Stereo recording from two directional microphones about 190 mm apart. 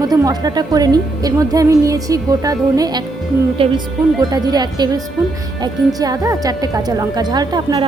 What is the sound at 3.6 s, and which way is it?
A woman's voice, 30° right (ahead or behind).